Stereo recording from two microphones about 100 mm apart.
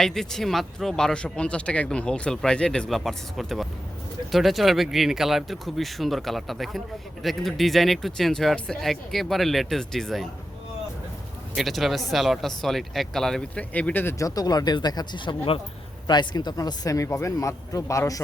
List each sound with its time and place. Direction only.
0.0 s speech: 5° left (ahead or behind)
11.5 s speech: centre (ahead or behind)
13.7 s speech: 15° left (ahead or behind)
14.2 s speech: 35° left (ahead or behind); by 15.6 s 60° left (ahead or behind)
16.0 s speech: 45° left (ahead or behind); by 18.2 s 30° left (ahead or behind)